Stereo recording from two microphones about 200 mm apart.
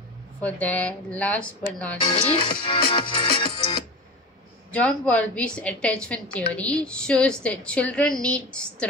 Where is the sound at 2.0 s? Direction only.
30° left (ahead or behind).